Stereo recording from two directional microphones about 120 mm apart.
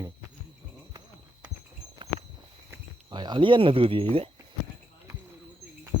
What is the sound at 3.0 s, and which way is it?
Speech, 40° right (ahead or behind).